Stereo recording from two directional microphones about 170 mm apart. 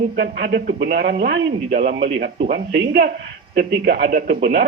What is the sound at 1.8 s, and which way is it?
Speech, 40° right (ahead or behind).